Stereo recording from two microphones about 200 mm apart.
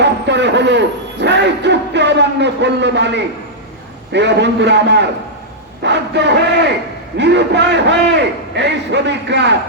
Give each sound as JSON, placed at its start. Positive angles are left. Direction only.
{"t": 0.0, "sound": "a man's voice", "side_deg": -60}